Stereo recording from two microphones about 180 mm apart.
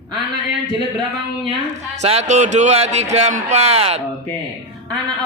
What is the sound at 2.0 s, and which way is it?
A man's voice, 35° right (ahead or behind).